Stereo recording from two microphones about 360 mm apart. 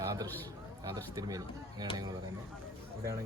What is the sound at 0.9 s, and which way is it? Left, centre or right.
Speech, centre.